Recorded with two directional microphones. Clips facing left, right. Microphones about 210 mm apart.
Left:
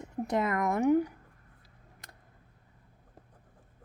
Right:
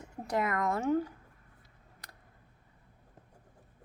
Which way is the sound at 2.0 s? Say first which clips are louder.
Even; 20° left (ahead or behind).